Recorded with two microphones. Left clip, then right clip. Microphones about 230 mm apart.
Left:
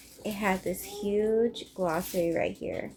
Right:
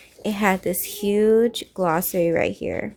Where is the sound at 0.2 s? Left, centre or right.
Right.